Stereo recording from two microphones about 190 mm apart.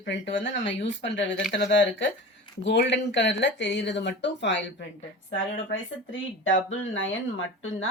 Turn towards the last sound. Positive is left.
turn(degrees=85)